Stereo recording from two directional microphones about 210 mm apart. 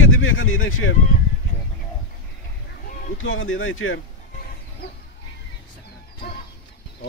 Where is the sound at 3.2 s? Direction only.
70° left (ahead or behind).